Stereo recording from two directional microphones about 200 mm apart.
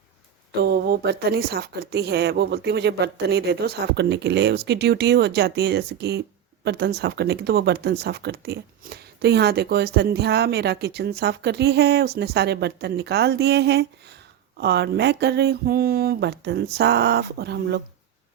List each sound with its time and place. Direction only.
0.6 s speech: 50° right (ahead or behind)